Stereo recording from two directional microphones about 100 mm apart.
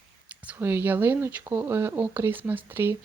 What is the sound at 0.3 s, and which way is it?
Speech, 15° right (ahead or behind).